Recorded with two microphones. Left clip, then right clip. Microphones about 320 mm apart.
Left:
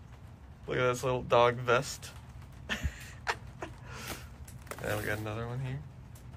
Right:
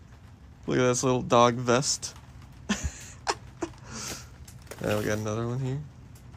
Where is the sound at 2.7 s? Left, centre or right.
Centre.